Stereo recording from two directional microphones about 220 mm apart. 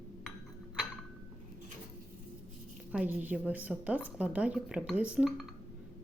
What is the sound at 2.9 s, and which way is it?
A woman's voice, 5° right (ahead or behind).